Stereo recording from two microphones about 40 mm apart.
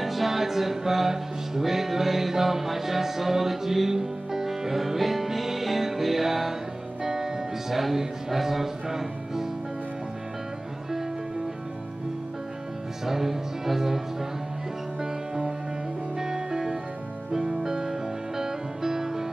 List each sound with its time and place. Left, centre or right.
0.0 s music: centre
13.0 s music: centre